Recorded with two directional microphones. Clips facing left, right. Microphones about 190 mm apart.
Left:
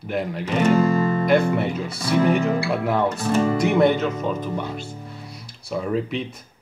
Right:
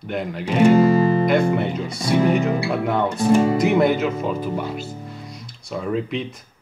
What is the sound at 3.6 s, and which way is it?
Speech, centre (ahead or behind).